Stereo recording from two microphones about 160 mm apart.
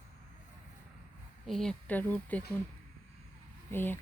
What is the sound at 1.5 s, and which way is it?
Speech, 5° left (ahead or behind).